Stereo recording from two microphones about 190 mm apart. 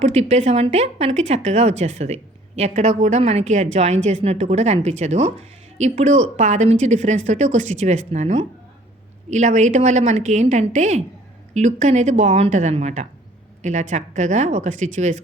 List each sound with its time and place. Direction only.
0.0 s speech: 35° right (ahead or behind)